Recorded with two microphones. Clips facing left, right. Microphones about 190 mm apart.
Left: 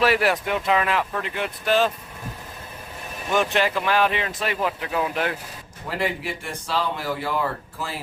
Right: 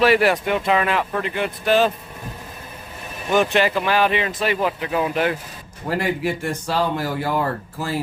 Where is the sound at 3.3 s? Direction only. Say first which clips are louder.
Right 4 dB; centre (ahead or behind).